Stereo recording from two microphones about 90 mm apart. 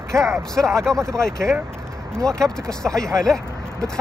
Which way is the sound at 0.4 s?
5° left (ahead or behind).